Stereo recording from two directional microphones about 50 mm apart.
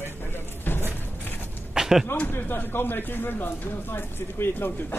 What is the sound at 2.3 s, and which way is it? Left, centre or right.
Speech, left.